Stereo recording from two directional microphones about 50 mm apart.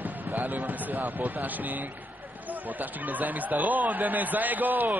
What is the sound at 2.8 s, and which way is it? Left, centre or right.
Speech, right.